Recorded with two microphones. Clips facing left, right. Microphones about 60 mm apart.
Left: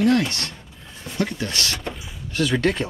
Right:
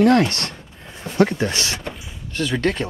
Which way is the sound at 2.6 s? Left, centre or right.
Centre.